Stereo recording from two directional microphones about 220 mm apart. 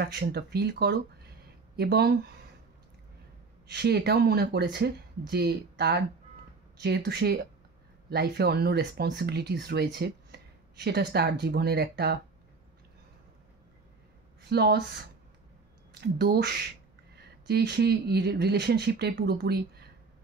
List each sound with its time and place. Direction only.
0.0 s speech: 50° right (ahead or behind)
3.6 s speech: 50° right (ahead or behind)
14.5 s speech: 50° right (ahead or behind)
16.0 s speech: 45° right (ahead or behind)